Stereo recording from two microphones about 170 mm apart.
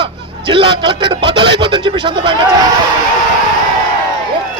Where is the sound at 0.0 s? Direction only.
30° right (ahead or behind).